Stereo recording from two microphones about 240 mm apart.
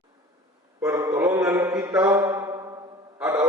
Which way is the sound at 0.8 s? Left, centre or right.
Centre.